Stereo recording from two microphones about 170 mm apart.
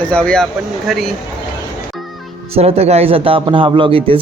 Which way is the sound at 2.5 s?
40° right (ahead or behind).